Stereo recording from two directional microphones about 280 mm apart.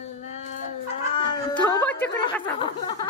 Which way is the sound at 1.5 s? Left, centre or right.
Centre.